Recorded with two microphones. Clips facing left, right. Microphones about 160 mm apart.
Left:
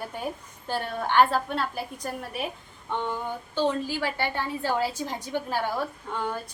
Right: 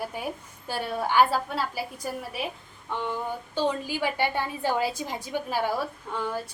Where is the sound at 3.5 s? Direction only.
15° right (ahead or behind).